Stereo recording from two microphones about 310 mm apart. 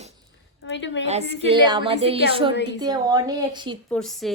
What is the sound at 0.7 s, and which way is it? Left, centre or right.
Speech, left.